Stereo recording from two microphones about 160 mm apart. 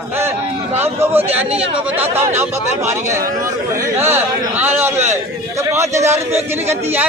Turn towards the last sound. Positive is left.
turn(degrees=-15)  # may be behind; listen again after turning